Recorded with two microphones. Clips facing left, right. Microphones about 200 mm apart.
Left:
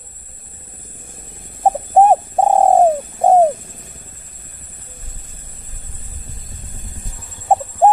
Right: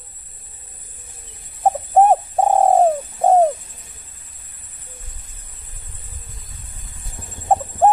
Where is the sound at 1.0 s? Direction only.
50° left (ahead or behind).